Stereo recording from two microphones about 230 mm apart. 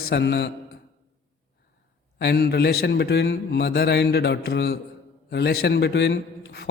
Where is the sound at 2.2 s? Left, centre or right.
Left.